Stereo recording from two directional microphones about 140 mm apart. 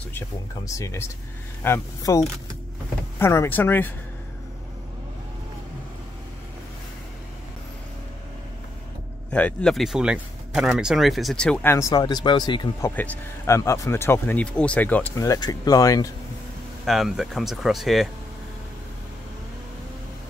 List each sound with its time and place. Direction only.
0.7 s speech: 20° left (ahead or behind)
9.3 s speech: 10° left (ahead or behind)
11.7 s speech: 25° left (ahead or behind)
12.8 s speech: 10° left (ahead or behind)
15.2 s speech: 25° left (ahead or behind)
16.8 s speech: centre (ahead or behind)